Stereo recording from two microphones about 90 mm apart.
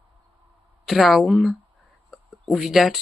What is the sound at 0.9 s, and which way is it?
Speech, centre (ahead or behind).